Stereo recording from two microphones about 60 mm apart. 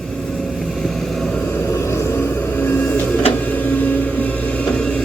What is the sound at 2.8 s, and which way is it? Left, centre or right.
Printer, left.